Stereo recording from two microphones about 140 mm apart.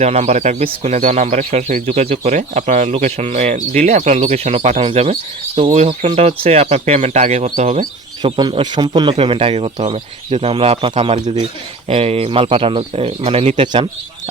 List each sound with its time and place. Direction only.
0.0 s speech: 50° right (ahead or behind)
8.2 s speech: 35° right (ahead or behind); by 13.6 s 50° right (ahead or behind)